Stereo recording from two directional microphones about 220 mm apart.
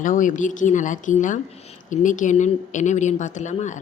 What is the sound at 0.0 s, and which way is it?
A woman's voice, 35° left (ahead or behind).